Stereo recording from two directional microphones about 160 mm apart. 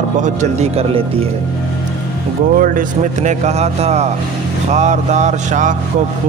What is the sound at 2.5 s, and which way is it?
Speech, 60° right (ahead or behind).